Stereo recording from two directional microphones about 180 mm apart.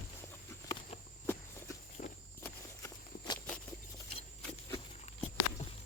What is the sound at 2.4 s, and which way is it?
Walk, 15° left (ahead or behind).